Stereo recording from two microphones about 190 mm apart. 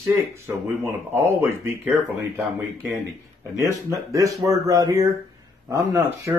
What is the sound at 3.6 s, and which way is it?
Speech, 15° right (ahead or behind).